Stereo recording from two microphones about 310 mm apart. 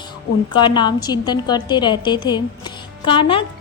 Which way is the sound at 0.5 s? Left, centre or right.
Centre.